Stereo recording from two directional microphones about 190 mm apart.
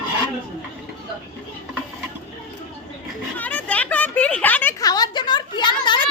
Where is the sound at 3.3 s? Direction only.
10° left (ahead or behind).